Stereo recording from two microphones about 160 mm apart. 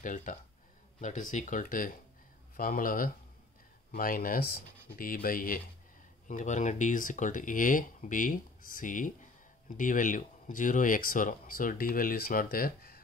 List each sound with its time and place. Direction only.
0.0 s speech: 55° left (ahead or behind)
6.2 s speech: 50° left (ahead or behind); by 13.0 s 65° left (ahead or behind)